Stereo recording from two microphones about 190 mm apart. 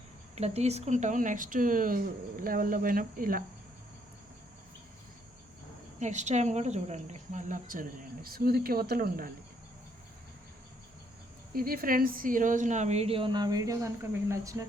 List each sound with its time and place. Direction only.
0.3 s speech: 35° right (ahead or behind)
6.0 s speech: 40° right (ahead or behind)
11.5 s a woman's voice: 50° right (ahead or behind); by 14.7 s 15° right (ahead or behind)